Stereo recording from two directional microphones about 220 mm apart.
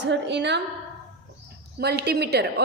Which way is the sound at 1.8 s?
50° right (ahead or behind).